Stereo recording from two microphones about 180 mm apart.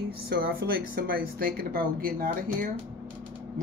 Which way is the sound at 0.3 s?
55° right (ahead or behind).